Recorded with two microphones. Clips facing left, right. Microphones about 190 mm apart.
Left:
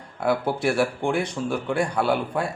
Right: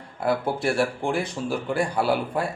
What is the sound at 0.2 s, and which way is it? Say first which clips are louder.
Speech: left 1 dB; centre (ahead or behind).